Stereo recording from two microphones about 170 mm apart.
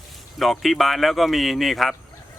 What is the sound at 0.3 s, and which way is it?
Speech, centre (ahead or behind).